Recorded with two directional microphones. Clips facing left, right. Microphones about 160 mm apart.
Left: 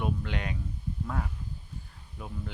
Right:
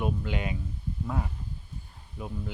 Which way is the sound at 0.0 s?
5° right (ahead or behind).